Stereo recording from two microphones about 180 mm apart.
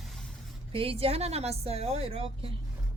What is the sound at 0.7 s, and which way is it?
A woman's voice, 30° right (ahead or behind).